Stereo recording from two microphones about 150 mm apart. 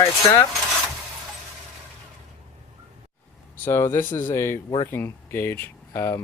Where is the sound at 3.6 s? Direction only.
15° left (ahead or behind).